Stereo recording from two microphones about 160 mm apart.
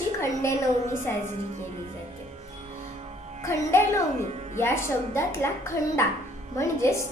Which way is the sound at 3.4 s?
15° left (ahead or behind).